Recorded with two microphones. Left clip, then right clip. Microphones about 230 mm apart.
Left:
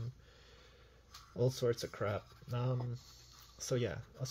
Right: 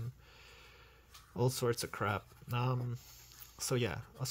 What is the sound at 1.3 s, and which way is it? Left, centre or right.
Speech, right.